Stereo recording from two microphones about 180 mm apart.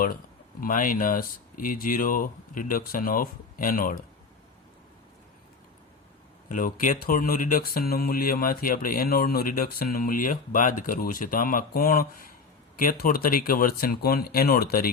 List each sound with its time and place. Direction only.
0.6 s speech: 50° left (ahead or behind)
6.5 s speech: 50° left (ahead or behind)